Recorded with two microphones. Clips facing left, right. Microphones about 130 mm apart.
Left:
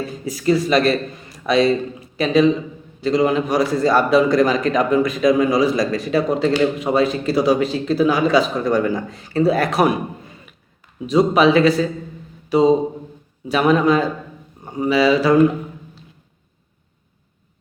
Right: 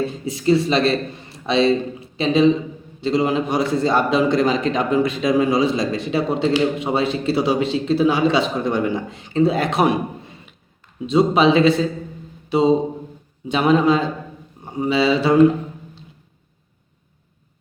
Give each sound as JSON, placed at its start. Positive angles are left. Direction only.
{"t": 0.0, "sound": "a man's voice", "side_deg": -25}
{"t": 12.5, "sound": "a sound", "side_deg": -25}
{"t": 13.5, "sound": "a man's voice", "side_deg": -25}